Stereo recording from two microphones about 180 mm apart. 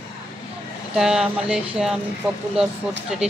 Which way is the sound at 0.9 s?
5° right (ahead or behind).